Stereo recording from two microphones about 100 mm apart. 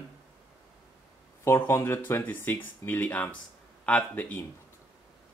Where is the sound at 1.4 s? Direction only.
25° left (ahead or behind).